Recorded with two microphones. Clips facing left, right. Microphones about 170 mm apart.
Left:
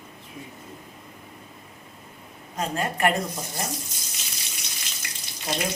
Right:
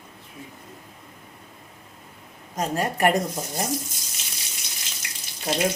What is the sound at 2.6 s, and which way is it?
Speech, 40° right (ahead or behind).